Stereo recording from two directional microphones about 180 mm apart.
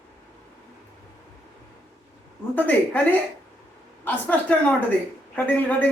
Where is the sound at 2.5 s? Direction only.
10° left (ahead or behind).